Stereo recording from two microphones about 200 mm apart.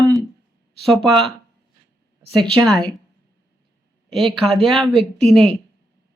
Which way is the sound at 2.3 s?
Centre (ahead or behind).